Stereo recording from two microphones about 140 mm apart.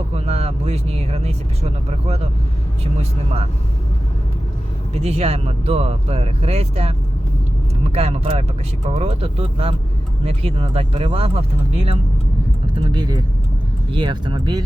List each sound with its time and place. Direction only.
0.3 s speech: 45° right (ahead or behind)
4.9 s speech: 50° right (ahead or behind)
12.7 s speech: 30° right (ahead or behind)